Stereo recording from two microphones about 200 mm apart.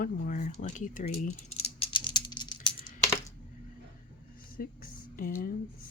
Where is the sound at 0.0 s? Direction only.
40° left (ahead or behind).